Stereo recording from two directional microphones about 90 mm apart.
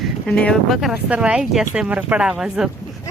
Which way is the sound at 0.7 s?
Centre (ahead or behind).